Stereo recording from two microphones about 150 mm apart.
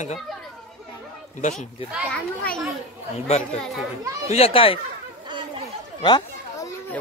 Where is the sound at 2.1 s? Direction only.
5° left (ahead or behind).